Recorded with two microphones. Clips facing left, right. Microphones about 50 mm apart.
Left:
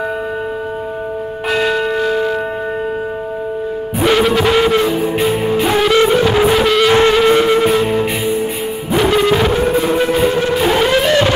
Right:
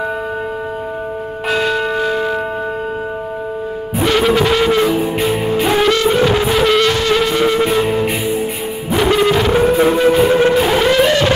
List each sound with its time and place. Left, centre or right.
1.5 s church bell: centre
4.0 s music: centre
6.9 s music: centre
7.3 s music: centre
7.7 s music: centre
9.5 s music: centre
10.5 s music: centre